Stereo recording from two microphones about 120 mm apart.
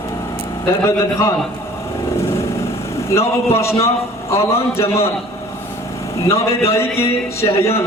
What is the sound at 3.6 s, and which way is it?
A man's voice, 25° left (ahead or behind).